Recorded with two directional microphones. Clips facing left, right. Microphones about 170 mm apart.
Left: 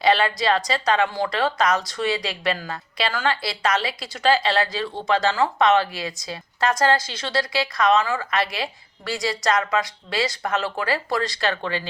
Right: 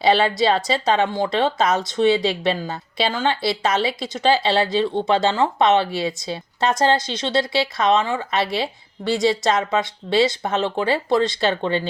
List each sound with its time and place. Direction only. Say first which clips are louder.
0.0 s speech: right 3 dB; 30° right (ahead or behind)
3.8 s a woman's voice: right 5 dB; centre (ahead or behind)
4.4 s speech: right 4 dB; 30° right (ahead or behind)